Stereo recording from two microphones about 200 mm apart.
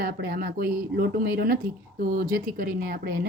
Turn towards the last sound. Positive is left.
turn(degrees=-45)  # may be behind; listen again after turning